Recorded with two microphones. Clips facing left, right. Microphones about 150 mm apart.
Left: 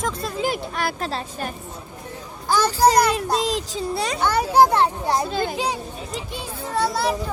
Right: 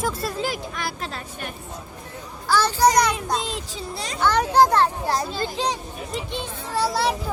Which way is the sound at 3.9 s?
65° left (ahead or behind).